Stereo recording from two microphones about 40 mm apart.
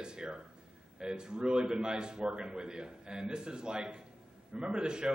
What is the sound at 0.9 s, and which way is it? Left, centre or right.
A man's voice, right.